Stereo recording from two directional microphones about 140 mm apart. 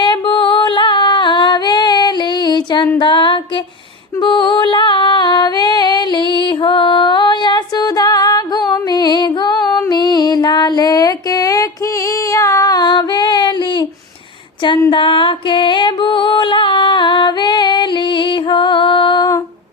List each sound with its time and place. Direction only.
0.0 s female singing: 35° left (ahead or behind)
4.2 s music: 35° left (ahead or behind)
12.3 s child singing: 25° left (ahead or behind)
14.8 s music: 35° left (ahead or behind)